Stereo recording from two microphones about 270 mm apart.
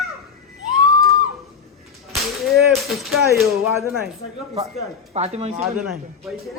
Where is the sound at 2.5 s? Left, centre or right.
Centre.